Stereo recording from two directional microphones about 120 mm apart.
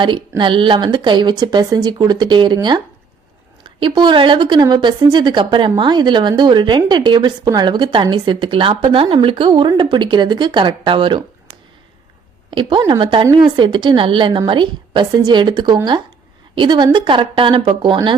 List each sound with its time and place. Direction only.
0.0 s a woman's voice: 40° right (ahead or behind)
12.5 s a woman's voice: 45° right (ahead or behind)